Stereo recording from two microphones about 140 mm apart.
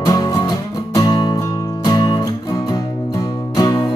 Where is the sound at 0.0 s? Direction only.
25° left (ahead or behind).